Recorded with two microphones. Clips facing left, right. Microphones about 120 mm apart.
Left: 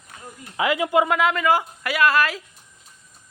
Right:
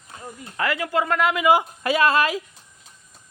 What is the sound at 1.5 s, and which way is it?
Speech, 20° right (ahead or behind).